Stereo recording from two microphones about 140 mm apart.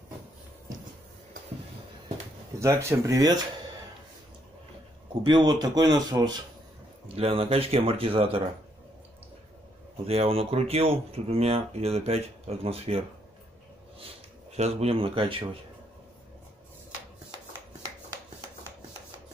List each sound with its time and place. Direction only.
2.6 s speech: 20° right (ahead or behind)
5.2 s speech: 30° right (ahead or behind)
7.2 s speech: 45° right (ahead or behind)
10.0 s speech: 45° right (ahead or behind)
14.5 s speech: 50° right (ahead or behind)